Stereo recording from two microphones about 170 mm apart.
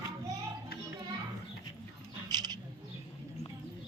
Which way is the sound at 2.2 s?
25° right (ahead or behind).